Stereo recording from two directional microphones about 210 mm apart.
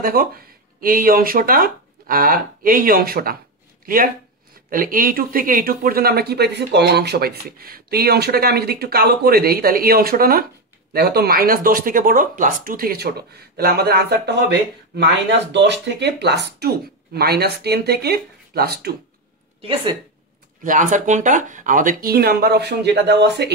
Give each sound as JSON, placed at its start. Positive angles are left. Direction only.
{"t": 0.0, "sound": "speech", "side_deg": -45}
{"t": 20.6, "sound": "speech", "side_deg": -40}